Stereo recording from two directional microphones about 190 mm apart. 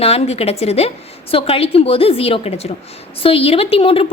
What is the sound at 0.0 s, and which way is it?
A woman's voice, 35° left (ahead or behind).